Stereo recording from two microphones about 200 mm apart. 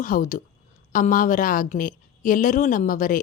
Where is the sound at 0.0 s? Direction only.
40° left (ahead or behind).